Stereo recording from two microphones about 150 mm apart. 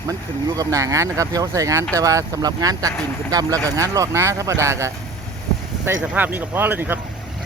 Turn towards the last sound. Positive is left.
turn(degrees=-15)  # may be behind; listen again after turning